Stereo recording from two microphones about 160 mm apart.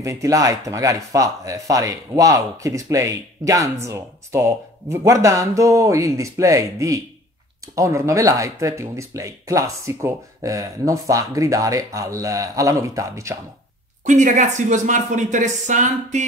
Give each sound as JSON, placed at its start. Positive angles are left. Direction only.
{"t": 0.0, "sound": "speech", "side_deg": -20}
{"t": 14.0, "sound": "speech", "side_deg": -50}